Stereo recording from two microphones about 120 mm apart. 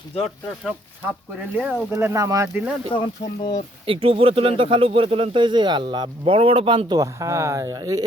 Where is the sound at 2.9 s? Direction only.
45° left (ahead or behind).